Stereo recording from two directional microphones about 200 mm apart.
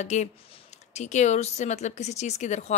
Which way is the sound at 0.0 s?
35° left (ahead or behind).